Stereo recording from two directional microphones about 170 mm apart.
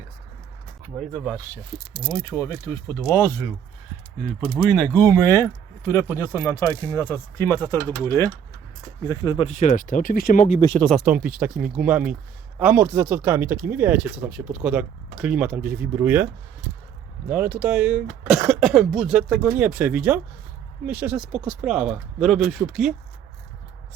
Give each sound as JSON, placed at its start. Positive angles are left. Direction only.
{"t": 0.9, "sound": "speech", "side_deg": 0}
{"t": 2.3, "sound": "speech", "side_deg": 15}
{"t": 4.4, "sound": "speech", "side_deg": 0}
{"t": 9.6, "sound": "speech", "side_deg": 50}
{"t": 10.8, "sound": "speech", "side_deg": 5}
{"t": 11.0, "sound": "speech", "side_deg": -5}